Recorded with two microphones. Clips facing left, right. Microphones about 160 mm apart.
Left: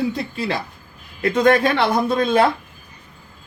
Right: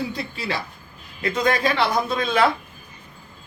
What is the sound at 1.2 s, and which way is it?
Speech, 60° left (ahead or behind).